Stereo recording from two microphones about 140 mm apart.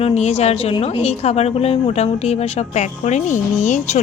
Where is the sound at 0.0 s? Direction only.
50° left (ahead or behind).